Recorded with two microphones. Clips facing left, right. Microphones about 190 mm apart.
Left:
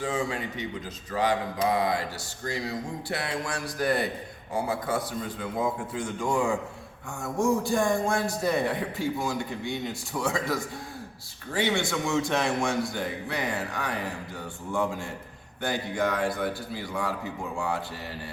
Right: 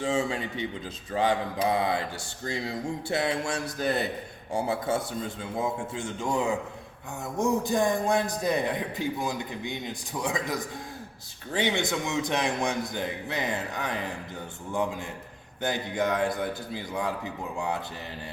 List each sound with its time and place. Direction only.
0.0 s a man's voice: 25° right (ahead or behind)